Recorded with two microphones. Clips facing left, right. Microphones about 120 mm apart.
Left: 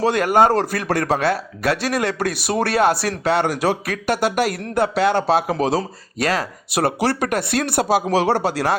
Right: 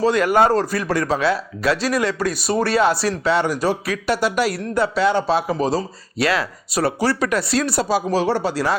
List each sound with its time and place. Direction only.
0.0 s speech: 55° left (ahead or behind)
6.1 s speech: 45° left (ahead or behind)
6.7 s speech: 65° left (ahead or behind)